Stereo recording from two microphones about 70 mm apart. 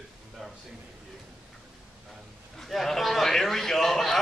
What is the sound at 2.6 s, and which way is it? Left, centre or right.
A man's voice, centre.